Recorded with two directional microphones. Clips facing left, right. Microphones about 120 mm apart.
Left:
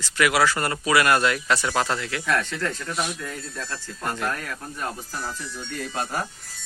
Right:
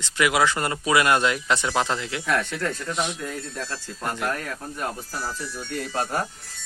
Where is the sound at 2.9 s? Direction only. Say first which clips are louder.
Right 1 dB; 20° right (ahead or behind).